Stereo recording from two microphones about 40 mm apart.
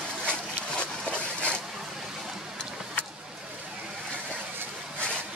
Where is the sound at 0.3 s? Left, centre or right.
Left.